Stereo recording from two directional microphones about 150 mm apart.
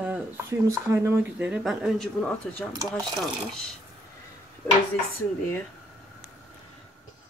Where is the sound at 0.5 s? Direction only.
20° right (ahead or behind).